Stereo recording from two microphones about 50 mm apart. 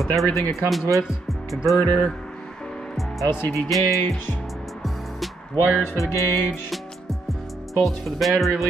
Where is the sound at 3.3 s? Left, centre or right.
Left.